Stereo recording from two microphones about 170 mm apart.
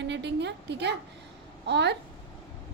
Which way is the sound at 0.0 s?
90° right.